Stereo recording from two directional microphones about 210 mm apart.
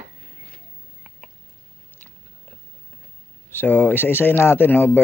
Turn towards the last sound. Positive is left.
turn(degrees=10)  # may be behind; listen again after turning